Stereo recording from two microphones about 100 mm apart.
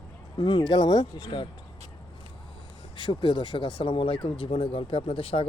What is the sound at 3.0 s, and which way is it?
Speech, 55° left (ahead or behind).